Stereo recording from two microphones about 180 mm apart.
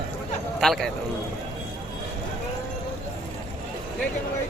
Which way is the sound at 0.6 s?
Centre (ahead or behind).